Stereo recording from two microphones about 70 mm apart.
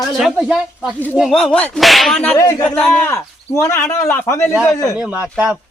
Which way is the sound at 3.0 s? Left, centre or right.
Left.